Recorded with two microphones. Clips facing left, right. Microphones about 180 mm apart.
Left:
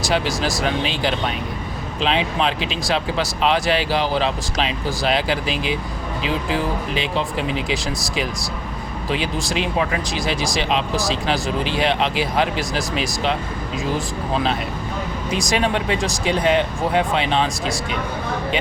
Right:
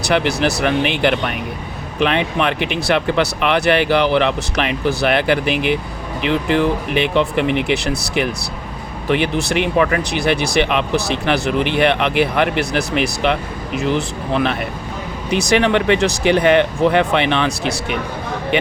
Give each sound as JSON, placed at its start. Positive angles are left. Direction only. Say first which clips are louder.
{"t": 0.0, "sound": "speech", "louder": "right 4 dB", "side_deg": -65}